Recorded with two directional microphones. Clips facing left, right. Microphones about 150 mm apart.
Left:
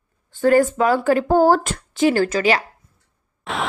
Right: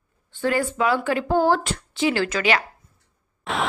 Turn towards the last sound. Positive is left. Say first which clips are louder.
# even
turn(degrees=0)  # may be behind; listen again after turning